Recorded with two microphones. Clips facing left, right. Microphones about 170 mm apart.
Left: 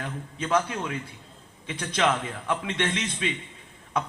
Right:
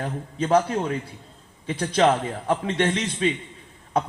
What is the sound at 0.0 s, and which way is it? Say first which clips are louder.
A man's voice: right 6 dB; 40° right (ahead or behind).